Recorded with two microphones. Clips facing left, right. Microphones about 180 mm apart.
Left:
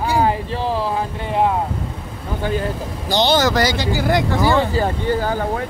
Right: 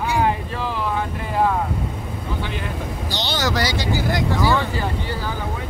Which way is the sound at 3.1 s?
50° left (ahead or behind).